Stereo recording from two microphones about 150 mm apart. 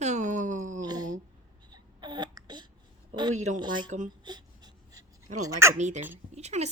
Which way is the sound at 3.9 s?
55° right (ahead or behind).